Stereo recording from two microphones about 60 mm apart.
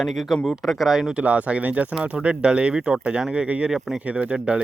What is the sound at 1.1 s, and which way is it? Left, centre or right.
Speech, right.